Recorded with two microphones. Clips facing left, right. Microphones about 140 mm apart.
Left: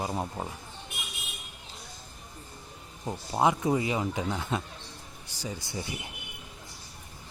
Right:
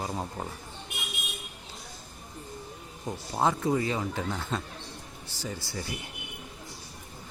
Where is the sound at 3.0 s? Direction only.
15° left (ahead or behind).